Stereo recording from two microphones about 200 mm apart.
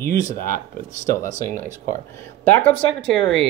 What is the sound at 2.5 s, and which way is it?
Speech, 10° left (ahead or behind).